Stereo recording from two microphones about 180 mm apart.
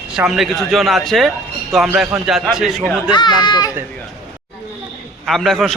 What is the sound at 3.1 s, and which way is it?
Speech, 25° left (ahead or behind).